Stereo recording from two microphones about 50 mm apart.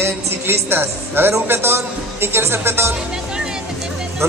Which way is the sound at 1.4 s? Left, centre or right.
Right.